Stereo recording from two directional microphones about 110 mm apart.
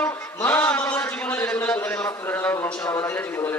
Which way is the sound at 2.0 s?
20° left (ahead or behind).